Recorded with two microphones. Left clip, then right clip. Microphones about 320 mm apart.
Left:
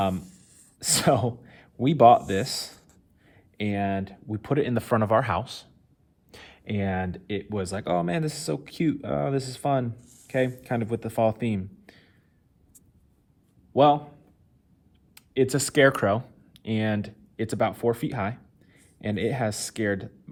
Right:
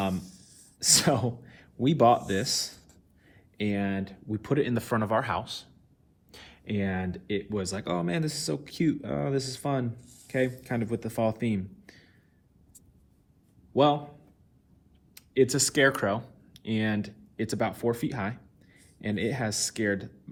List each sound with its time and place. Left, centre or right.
0.8 s speech: left
10.0 s a sound: centre
10.2 s speech: left
13.7 s speech: left
15.1 s speech: left